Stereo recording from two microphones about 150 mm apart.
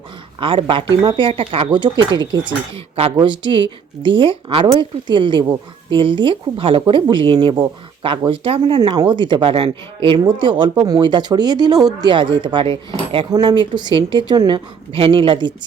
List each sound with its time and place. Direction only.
0.3 s speech: 35° right (ahead or behind)